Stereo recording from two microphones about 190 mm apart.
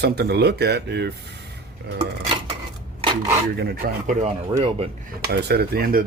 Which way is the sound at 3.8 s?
45° right (ahead or behind).